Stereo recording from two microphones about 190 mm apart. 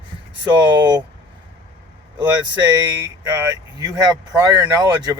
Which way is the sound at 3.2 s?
20° right (ahead or behind).